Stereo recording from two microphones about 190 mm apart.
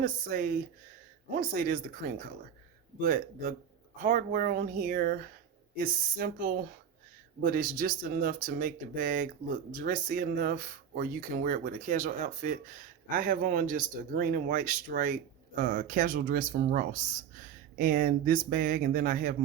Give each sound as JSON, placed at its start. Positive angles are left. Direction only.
{"t": 0.0, "sound": "speech", "side_deg": -45}